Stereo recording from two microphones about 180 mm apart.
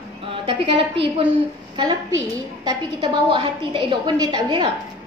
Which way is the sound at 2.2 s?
25° right (ahead or behind).